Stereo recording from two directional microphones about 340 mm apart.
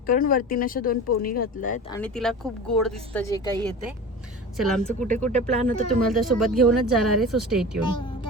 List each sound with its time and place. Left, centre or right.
0.1 s speech: left
1.9 s speech: centre
5.0 s speech: right
5.6 s speech: centre